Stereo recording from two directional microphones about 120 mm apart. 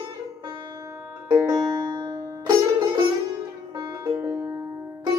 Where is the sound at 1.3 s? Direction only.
30° right (ahead or behind).